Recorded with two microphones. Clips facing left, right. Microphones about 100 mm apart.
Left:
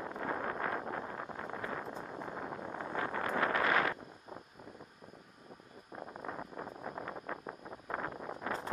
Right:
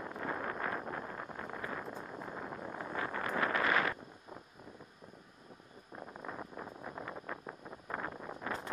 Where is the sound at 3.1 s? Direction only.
40° left (ahead or behind).